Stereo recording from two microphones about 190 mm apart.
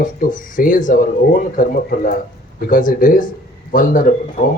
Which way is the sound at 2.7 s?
45° left (ahead or behind).